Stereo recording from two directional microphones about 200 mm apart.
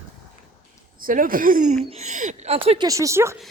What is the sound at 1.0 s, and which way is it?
Speech, 45° right (ahead or behind).